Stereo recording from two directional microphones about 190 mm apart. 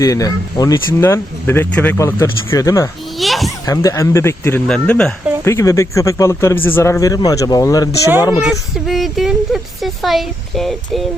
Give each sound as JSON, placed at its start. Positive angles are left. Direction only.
{"t": 0.0, "sound": "speech", "side_deg": 20}
{"t": 3.2, "sound": "children playing", "side_deg": 0}
{"t": 3.7, "sound": "speech", "side_deg": 15}
{"t": 5.5, "sound": "speech", "side_deg": 15}
{"t": 8.4, "sound": "speech", "side_deg": 0}